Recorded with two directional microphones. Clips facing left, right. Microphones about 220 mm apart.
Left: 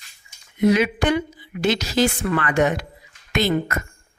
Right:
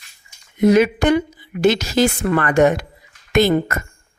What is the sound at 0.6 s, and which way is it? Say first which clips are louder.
A woman's voice: right 4 dB; 45° right (ahead or behind).